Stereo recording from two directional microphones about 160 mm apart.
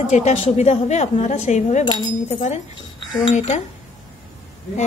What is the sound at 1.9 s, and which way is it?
Speech, 30° left (ahead or behind).